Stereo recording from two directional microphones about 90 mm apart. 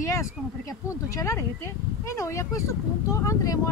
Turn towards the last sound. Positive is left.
turn(degrees=40)  # may be behind; listen again after turning